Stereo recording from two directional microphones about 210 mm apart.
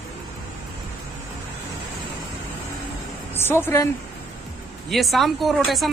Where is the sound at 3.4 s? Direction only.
10° left (ahead or behind).